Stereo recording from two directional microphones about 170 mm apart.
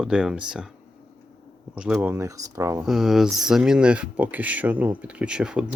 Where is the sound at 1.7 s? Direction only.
5° right (ahead or behind).